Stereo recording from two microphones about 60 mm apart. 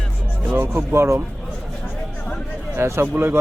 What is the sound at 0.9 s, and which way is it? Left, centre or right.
Speech, right.